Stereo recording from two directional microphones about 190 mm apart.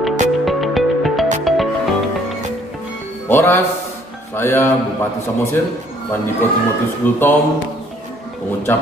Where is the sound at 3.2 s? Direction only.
10° left (ahead or behind).